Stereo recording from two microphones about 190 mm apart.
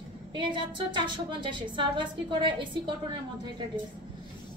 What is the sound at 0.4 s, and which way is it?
A woman's voice, 25° right (ahead or behind).